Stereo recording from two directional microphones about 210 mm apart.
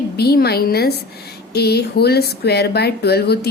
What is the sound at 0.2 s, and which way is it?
A woman's voice, 50° left (ahead or behind).